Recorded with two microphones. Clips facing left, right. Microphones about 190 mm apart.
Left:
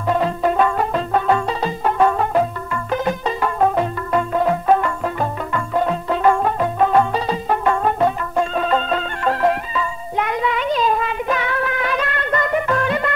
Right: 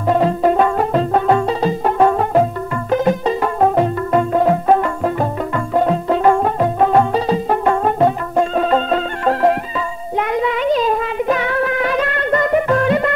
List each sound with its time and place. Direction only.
0.0 s music: 35° right (ahead or behind)